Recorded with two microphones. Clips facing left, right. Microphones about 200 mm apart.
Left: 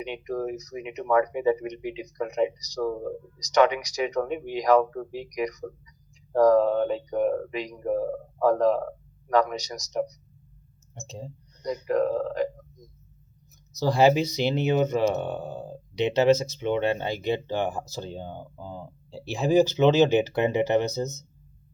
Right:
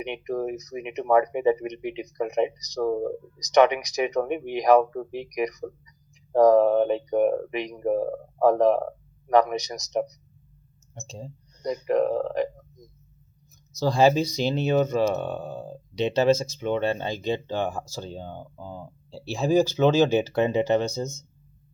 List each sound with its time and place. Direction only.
0.0 s speech: 20° right (ahead or behind)
6.3 s speech: 20° right (ahead or behind)
11.0 s speech: 15° left (ahead or behind)
11.6 s speech: 20° right (ahead or behind)
13.7 s speech: 15° left (ahead or behind)
18.5 s speech: 10° right (ahead or behind)
19.1 s speech: 15° left (ahead or behind)